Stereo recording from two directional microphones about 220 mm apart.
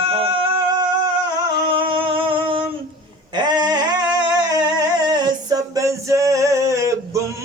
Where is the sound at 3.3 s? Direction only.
20° right (ahead or behind).